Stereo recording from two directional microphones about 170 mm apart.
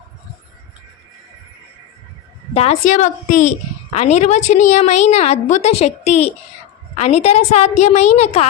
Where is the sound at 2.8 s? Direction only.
45° left (ahead or behind).